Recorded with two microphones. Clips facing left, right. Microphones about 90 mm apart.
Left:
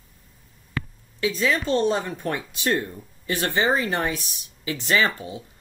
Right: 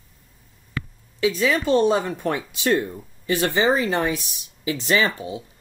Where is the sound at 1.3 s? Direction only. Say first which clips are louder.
Right 3 dB; 10° right (ahead or behind).